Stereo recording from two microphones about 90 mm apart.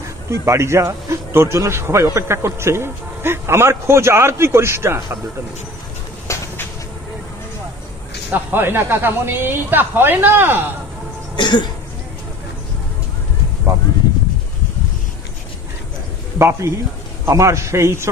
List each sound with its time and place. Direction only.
0.0 s a man's voice: 35° right (ahead or behind)
6.2 s a sound: 35° left (ahead or behind)
8.3 s a man's voice: 25° right (ahead or behind)
11.3 s cough: 60° left (ahead or behind)
13.7 s a sound: 25° right (ahead or behind)
16.3 s a man's voice: 30° right (ahead or behind)